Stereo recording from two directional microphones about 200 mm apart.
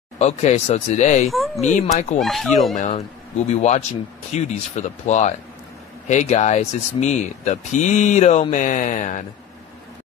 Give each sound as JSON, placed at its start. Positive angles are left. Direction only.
{"t": 0.2, "sound": "speech", "side_deg": 35}
{"t": 2.1, "sound": "speech", "side_deg": 0}
{"t": 2.7, "sound": "speech", "side_deg": 40}